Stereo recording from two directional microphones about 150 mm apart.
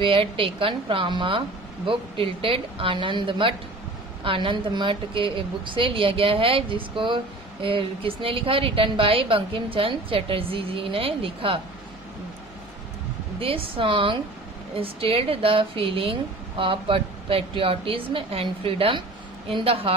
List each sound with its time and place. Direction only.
0.0 s a woman's voice: 35° right (ahead or behind)
13.4 s a woman's voice: 40° right (ahead or behind)